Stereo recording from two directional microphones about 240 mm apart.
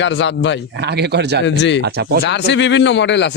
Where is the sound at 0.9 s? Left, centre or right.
Right.